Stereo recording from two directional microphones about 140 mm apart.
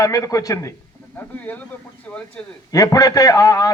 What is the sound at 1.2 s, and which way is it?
Speech, 10° left (ahead or behind).